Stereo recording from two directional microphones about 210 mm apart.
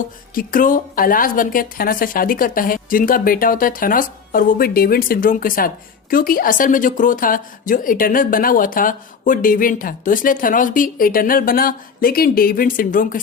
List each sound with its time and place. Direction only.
0.3 s speech: 40° left (ahead or behind)